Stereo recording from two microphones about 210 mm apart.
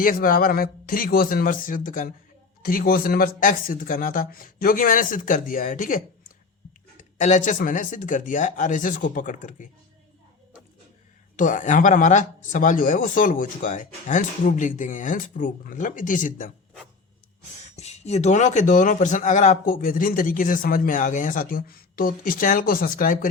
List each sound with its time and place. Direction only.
0.0 s a man's voice: 40° left (ahead or behind)
11.3 s a man's voice: 40° left (ahead or behind)
17.7 s a man's voice: 30° left (ahead or behind)